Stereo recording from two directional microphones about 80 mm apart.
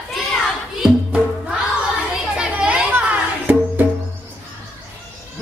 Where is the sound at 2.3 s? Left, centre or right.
Centre.